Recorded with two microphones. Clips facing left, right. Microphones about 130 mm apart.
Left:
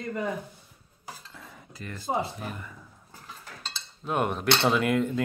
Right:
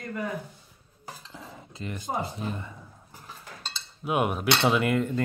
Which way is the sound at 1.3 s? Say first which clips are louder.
Right 4 dB; 25° right (ahead or behind).